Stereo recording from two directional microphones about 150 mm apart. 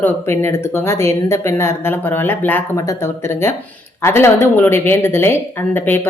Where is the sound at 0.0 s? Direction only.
15° left (ahead or behind).